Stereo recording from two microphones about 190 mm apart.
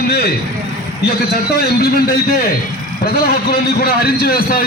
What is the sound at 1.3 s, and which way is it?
Speech, 60° left (ahead or behind).